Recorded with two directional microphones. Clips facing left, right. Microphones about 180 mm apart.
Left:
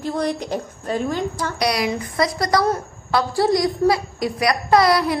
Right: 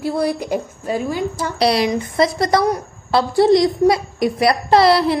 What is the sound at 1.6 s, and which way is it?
A child's voice, 30° right (ahead or behind).